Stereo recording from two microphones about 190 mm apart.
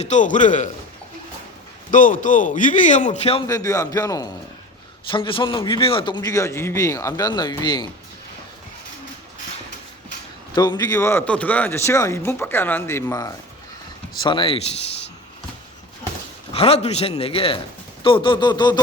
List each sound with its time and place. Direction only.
0.0 s a man's voice: 40° left (ahead or behind)
1.9 s speech: 45° left (ahead or behind)
3.4 s a man's voice: 20° left (ahead or behind)
10.5 s a man's voice: 20° left (ahead or behind)
14.3 s a man's voice: 25° left (ahead or behind)
16.5 s a man's voice: 30° left (ahead or behind)